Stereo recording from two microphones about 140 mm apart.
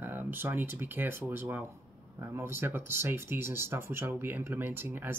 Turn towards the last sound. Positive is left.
turn(degrees=-15)  # may be behind; listen again after turning